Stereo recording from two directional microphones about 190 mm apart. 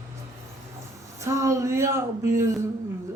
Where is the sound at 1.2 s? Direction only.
15° right (ahead or behind).